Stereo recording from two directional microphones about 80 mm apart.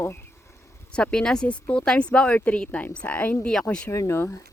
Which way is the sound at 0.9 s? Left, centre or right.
Centre.